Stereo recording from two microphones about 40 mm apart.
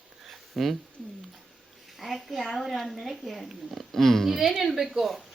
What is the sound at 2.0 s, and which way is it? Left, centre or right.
Speech, centre.